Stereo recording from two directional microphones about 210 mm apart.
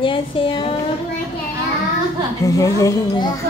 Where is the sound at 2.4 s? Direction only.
15° left (ahead or behind).